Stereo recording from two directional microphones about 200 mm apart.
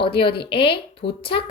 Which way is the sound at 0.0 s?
25° left (ahead or behind).